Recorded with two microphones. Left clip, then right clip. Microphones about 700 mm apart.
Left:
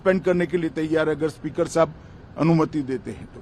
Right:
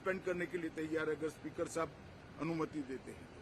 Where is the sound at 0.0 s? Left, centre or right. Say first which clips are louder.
Left 18 dB; left.